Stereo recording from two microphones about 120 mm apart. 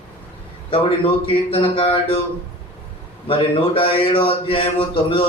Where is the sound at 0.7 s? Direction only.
50° left (ahead or behind).